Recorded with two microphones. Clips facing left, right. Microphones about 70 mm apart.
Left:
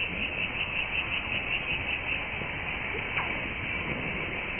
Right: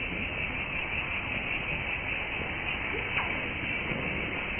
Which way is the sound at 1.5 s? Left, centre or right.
Right.